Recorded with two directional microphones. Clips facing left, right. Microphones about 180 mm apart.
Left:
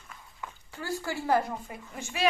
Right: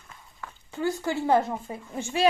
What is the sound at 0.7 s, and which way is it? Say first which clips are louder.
A woman's voice: right 7 dB; 20° right (ahead or behind).